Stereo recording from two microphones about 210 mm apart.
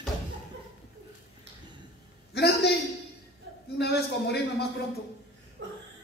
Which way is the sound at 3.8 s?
50° left (ahead or behind).